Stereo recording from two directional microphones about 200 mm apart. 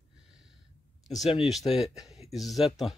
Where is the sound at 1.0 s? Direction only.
Centre (ahead or behind).